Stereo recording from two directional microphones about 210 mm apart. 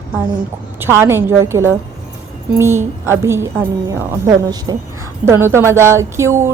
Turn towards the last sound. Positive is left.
turn(degrees=-10)  # may be behind; listen again after turning